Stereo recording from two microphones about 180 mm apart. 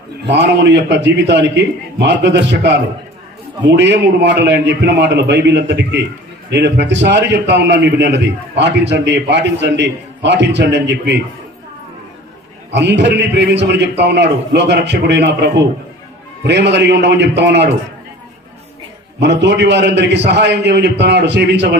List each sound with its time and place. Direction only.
0.3 s a man's voice: 75° right (ahead or behind)
12.7 s a man's voice: 75° right (ahead or behind)
19.2 s a man's voice: 75° right (ahead or behind)